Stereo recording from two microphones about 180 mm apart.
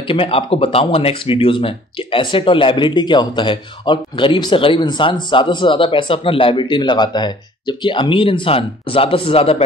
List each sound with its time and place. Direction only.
0.1 s speech: 30° left (ahead or behind)